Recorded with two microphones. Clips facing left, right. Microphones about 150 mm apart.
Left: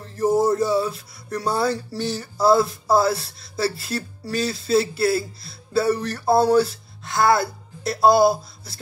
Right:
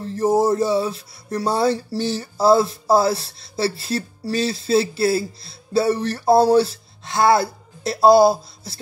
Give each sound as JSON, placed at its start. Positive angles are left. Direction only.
{"t": 0.0, "sound": "music", "side_deg": -25}
{"t": 6.5, "sound": "speech", "side_deg": -25}